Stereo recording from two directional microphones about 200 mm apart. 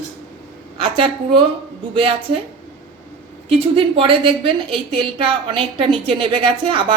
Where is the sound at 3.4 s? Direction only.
25° right (ahead or behind).